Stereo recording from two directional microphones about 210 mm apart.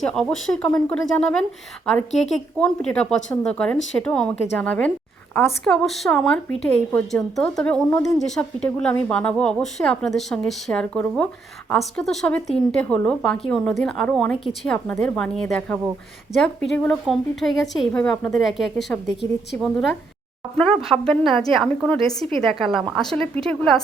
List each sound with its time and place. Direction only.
0.1 s a woman's voice: 5° left (ahead or behind)
2.6 s a woman's voice: 5° left (ahead or behind)